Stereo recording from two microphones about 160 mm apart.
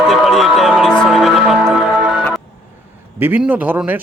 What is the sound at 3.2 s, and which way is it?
Speech, 10° right (ahead or behind).